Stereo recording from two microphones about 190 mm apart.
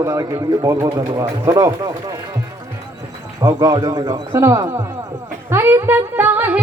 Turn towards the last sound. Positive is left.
turn(degrees=-10)  # may be behind; listen again after turning